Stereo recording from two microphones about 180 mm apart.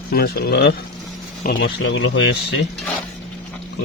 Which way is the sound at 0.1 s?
60° left (ahead or behind).